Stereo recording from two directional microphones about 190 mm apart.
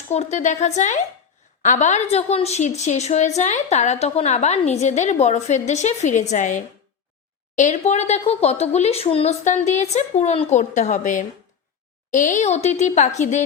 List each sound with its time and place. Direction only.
0.1 s a woman's voice: 35° left (ahead or behind)